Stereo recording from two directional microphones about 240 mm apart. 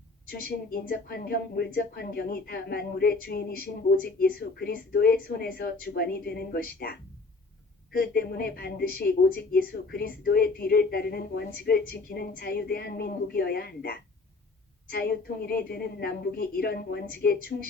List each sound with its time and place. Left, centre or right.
0.3 s speech: left